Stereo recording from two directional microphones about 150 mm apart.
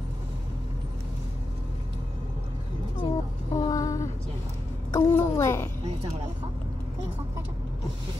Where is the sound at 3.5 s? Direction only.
25° left (ahead or behind).